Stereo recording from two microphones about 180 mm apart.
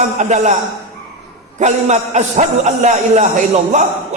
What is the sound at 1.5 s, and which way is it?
A man's voice, 40° right (ahead or behind).